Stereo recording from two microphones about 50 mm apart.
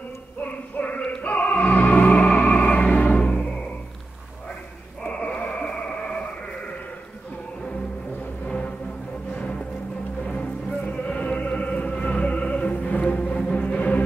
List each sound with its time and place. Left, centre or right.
0.7 s choir: left
1.2 s music: left
5.0 s a sound: left
8.5 s music: left
10.9 s music: left